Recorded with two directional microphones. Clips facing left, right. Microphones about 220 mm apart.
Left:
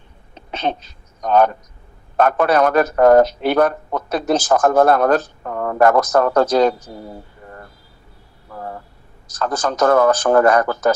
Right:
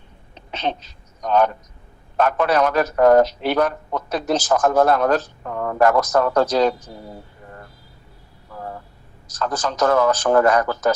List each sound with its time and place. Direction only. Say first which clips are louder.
0.5 s a man's voice: left 3 dB; 55° left (ahead or behind)
9.4 s a man's voice: left 3 dB; 55° left (ahead or behind)